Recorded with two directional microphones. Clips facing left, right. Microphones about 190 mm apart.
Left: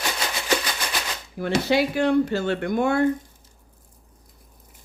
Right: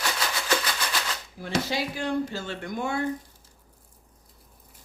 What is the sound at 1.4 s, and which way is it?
Speech, 65° left (ahead or behind).